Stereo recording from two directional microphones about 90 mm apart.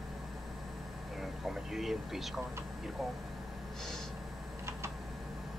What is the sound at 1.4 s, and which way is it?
Vehicle, 5° right (ahead or behind).